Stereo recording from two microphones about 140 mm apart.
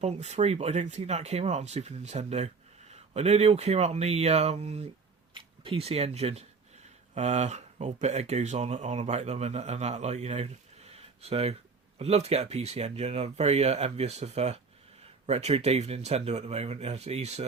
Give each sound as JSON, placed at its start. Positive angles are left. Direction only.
{"t": 0.0, "sound": "speech", "side_deg": -50}